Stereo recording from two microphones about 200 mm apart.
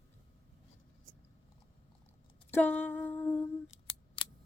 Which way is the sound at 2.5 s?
10° left (ahead or behind).